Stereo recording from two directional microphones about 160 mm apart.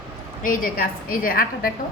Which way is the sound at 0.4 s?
60° left (ahead or behind).